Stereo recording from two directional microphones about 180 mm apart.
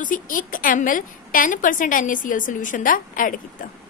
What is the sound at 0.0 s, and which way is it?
A woman's voice, 50° left (ahead or behind).